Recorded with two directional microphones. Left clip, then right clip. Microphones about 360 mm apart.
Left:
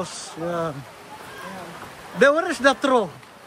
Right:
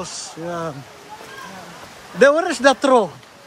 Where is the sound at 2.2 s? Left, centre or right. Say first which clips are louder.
Right 4 dB; centre.